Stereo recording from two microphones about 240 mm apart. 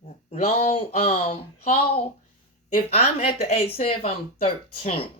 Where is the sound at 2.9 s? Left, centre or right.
Left.